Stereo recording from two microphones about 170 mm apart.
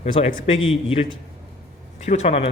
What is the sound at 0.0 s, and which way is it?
Speech, 45° left (ahead or behind).